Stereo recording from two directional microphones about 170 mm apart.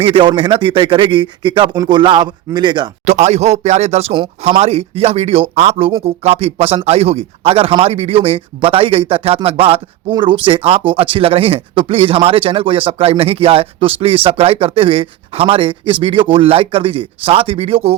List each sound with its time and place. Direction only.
0.0 s a man's voice: 30° right (ahead or behind)
3.1 s speech: 40° right (ahead or behind)